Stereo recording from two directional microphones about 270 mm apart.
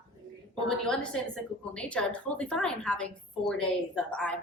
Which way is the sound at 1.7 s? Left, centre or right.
Centre.